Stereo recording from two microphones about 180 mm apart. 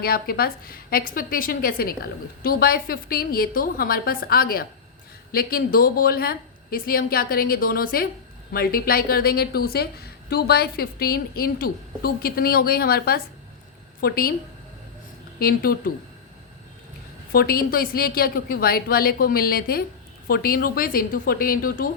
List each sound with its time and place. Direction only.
0.0 s a woman's voice: 55° left (ahead or behind)
15.4 s a woman's voice: 55° left (ahead or behind)
17.3 s a woman's voice: 55° left (ahead or behind)